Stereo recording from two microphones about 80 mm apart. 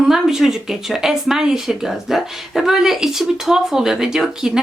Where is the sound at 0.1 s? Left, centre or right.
Centre.